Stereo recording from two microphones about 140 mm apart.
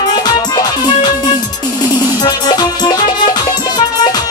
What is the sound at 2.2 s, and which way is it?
Music, 30° left (ahead or behind).